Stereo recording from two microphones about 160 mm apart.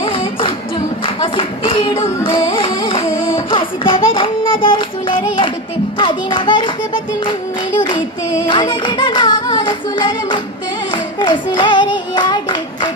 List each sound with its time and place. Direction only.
0.0 s singing: 35° left (ahead or behind)
1.0 s music: 35° left (ahead or behind)
3.3 s child singing: 30° left (ahead or behind)
6.0 s music: 30° left (ahead or behind)
10.9 s singing: 30° left (ahead or behind)